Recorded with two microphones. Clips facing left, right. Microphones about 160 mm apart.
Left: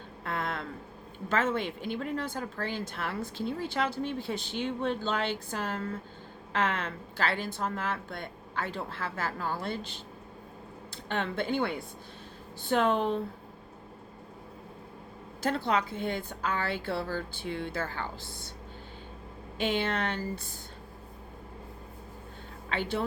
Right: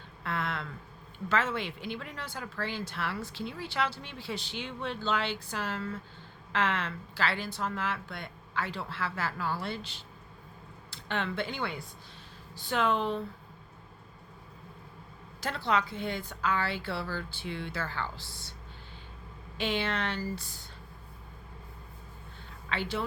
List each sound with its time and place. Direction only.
0.3 s a sound: 45° left (ahead or behind)
1.3 s a woman's voice: 45° left (ahead or behind)
11.1 s a woman's voice: 45° left (ahead or behind)
15.4 s a woman's voice: 50° left (ahead or behind)
19.5 s a woman's voice: 50° left (ahead or behind)
22.7 s a woman's voice: 50° left (ahead or behind)